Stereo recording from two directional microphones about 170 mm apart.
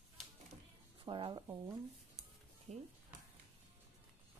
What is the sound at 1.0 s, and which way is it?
Speech, 25° right (ahead or behind).